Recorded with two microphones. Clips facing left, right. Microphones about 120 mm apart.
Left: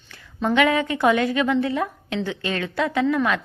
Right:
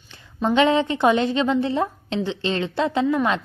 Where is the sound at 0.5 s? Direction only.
25° right (ahead or behind).